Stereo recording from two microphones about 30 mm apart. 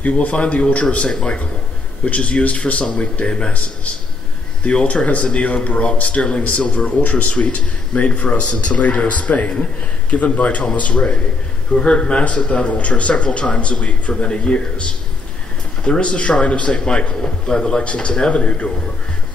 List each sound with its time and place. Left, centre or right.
0.3 s speech: left
1.0 s a man's voice: left
2.0 s speech: left
3.3 s a man's voice: left
3.5 s speech: left
4.9 s a man's voice: left
7.0 s speech: left
7.3 s speech: left
11.7 s a man's voice: left